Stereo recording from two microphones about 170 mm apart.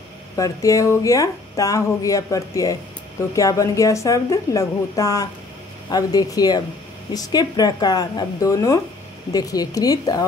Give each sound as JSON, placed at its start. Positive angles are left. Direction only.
{"t": 0.4, "sound": "speech", "side_deg": 20}